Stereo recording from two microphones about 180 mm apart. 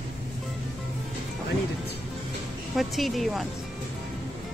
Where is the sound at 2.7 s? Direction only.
Centre (ahead or behind).